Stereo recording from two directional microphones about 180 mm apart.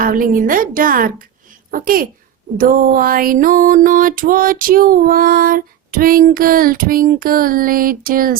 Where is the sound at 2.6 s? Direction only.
50° right (ahead or behind).